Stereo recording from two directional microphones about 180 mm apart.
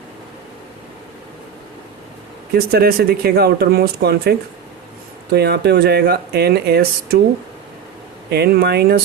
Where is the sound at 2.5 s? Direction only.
60° right (ahead or behind).